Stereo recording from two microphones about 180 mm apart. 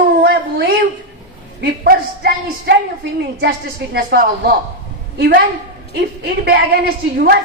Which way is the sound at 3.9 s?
60° right (ahead or behind).